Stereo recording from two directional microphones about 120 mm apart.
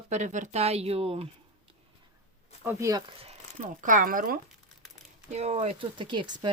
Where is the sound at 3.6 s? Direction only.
90° right.